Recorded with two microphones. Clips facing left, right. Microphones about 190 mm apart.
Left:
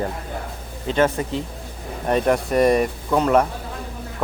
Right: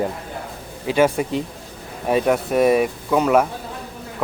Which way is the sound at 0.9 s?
10° right (ahead or behind).